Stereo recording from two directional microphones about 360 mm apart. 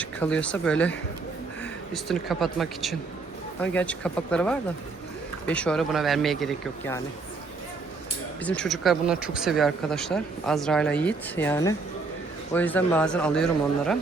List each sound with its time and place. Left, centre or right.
0.0 s speech: centre
8.4 s speech: centre